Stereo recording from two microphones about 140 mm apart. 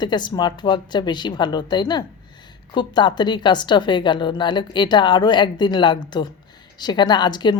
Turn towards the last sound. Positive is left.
turn(degrees=30)  # may be behind; listen again after turning